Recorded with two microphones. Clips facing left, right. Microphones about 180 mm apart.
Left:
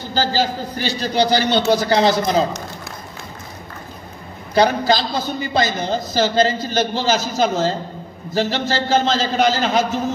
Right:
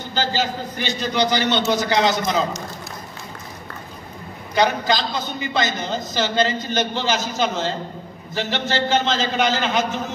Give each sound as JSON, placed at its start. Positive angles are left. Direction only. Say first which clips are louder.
{"t": 0.1, "sound": "a man's voice", "louder": "left 3 dB", "side_deg": 35}
{"t": 4.6, "sound": "a man's voice", "louder": "left 4 dB", "side_deg": 35}